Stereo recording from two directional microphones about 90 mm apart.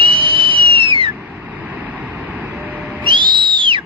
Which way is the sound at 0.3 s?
80° right.